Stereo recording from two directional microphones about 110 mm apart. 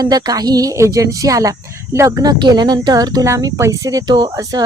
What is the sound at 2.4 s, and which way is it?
Speech, 40° right (ahead or behind).